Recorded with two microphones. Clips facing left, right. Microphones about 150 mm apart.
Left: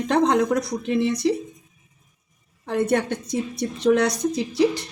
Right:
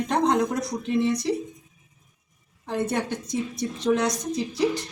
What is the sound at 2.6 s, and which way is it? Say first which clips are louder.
A woman's voice: left 5 dB; 65° left (ahead or behind).